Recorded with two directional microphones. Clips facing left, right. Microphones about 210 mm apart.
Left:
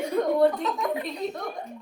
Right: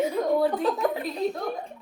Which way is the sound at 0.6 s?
30° right (ahead or behind).